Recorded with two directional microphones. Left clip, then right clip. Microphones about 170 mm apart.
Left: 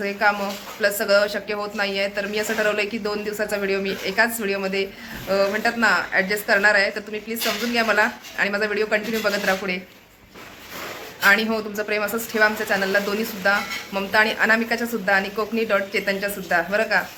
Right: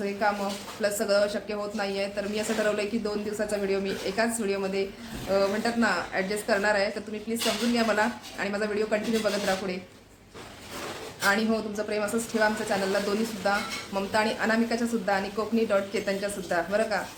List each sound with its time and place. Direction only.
0.0 s speech: centre (ahead or behind)
11.2 s speech: centre (ahead or behind)